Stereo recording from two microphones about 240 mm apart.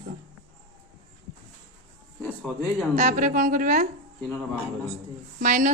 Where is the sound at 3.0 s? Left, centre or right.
Right.